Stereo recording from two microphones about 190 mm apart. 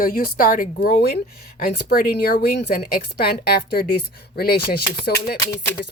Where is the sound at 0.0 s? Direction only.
50° left (ahead or behind).